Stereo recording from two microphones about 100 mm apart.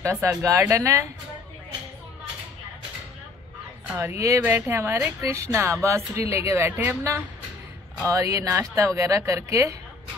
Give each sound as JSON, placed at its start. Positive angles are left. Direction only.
{"t": 0.0, "sound": "speech", "side_deg": -30}
{"t": 4.0, "sound": "a woman's voice", "side_deg": -25}